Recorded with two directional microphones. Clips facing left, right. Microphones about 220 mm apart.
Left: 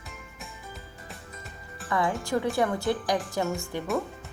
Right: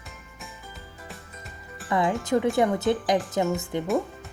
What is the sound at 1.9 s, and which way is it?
Speech, 15° right (ahead or behind).